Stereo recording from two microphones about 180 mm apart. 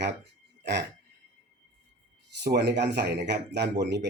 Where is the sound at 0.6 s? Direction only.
75° right (ahead or behind).